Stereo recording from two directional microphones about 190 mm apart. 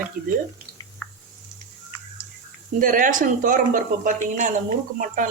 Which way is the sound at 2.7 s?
45° right (ahead or behind).